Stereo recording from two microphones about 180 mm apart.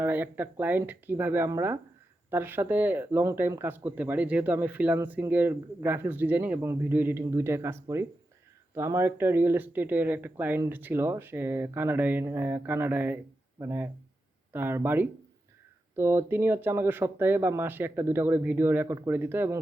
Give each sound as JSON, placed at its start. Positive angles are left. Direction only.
{"t": 0.0, "sound": "speech", "side_deg": -10}